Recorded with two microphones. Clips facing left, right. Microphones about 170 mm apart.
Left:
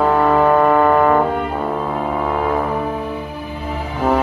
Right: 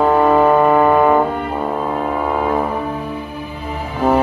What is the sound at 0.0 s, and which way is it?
Music, 15° right (ahead or behind).